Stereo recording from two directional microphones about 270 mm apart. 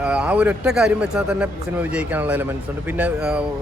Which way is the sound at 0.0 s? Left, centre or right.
Centre.